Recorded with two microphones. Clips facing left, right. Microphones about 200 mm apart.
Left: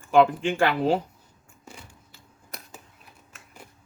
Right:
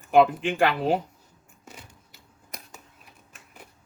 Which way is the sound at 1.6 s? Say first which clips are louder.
Left 1 dB; 20° right (ahead or behind).